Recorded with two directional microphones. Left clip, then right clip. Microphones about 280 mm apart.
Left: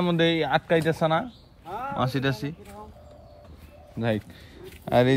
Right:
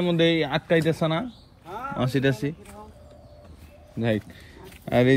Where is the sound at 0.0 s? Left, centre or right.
Left.